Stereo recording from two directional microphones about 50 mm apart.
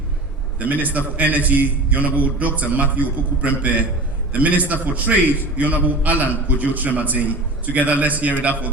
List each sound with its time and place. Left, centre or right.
0.6 s a man's voice: right